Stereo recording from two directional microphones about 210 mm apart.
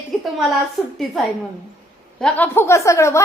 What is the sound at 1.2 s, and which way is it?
A woman's voice, centre (ahead or behind).